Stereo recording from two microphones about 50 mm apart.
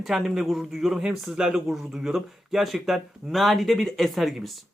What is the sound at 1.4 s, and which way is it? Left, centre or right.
Speech, centre.